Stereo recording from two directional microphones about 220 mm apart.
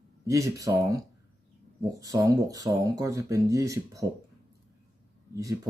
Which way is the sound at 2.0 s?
15° right (ahead or behind).